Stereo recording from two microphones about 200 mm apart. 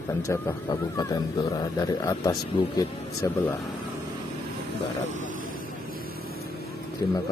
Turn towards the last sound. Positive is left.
turn(degrees=20)  # may be behind; listen again after turning